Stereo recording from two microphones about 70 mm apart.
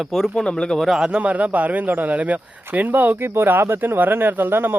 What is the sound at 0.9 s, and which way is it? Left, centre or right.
Speech, centre.